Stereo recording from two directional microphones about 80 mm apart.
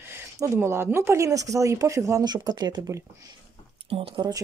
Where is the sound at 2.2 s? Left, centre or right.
Right.